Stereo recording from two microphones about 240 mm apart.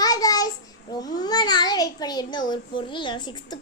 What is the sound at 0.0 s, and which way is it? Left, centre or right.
A child's voice, centre.